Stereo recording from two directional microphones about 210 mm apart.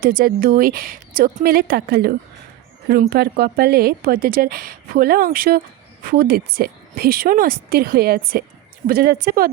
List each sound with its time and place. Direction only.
0.0 s speech: 45° right (ahead or behind)